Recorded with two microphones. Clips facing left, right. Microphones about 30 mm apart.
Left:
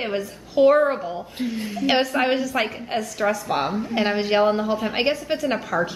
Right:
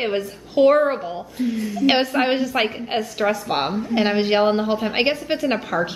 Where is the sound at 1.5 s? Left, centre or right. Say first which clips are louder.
Right 3 dB; left.